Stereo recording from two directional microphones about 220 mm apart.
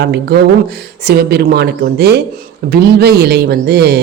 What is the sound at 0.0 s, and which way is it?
Speech, 50° right (ahead or behind).